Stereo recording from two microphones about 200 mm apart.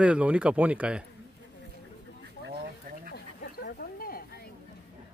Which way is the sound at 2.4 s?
50° right (ahead or behind).